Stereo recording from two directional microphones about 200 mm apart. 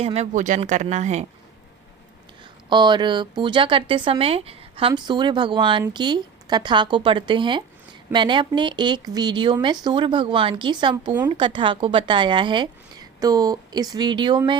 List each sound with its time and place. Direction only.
0.0 s speech: 30° right (ahead or behind)
2.6 s speech: 20° right (ahead or behind)